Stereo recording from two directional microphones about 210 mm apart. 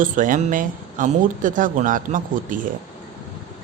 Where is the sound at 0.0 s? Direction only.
40° right (ahead or behind).